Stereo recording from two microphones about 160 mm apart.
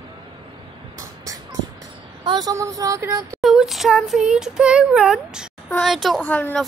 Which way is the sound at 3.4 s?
5° right (ahead or behind).